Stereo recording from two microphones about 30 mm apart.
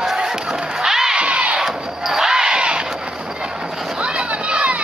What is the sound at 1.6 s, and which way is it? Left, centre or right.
Crowd, centre.